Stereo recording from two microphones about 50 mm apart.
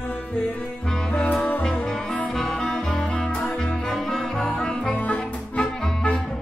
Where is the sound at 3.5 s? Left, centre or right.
Centre.